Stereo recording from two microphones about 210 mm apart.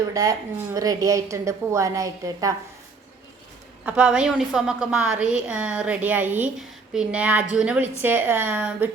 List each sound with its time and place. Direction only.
0.1 s a woman's voice: 15° right (ahead or behind)
3.8 s a woman's voice: 5° right (ahead or behind)